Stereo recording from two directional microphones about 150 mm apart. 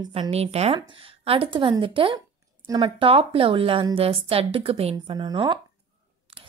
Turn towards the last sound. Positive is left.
turn(degrees=-35)  # may be behind; listen again after turning